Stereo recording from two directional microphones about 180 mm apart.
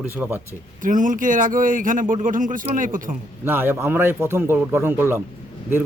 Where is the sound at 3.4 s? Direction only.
10° right (ahead or behind).